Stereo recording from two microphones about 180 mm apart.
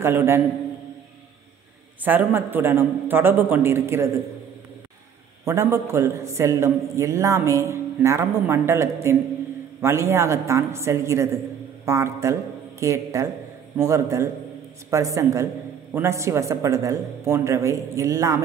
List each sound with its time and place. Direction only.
0.0 s a man's voice: 15° right (ahead or behind)
2.0 s a man's voice: 10° right (ahead or behind)
5.4 s a man's voice: 15° right (ahead or behind)